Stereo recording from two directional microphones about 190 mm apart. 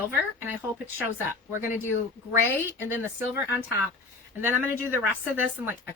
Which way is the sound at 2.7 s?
10° right (ahead or behind).